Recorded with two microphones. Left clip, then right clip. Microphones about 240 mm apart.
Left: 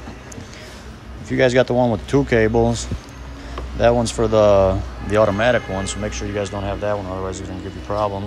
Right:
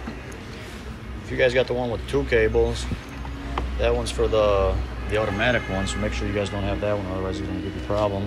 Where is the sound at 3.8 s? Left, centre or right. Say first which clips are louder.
Left 7 dB; left.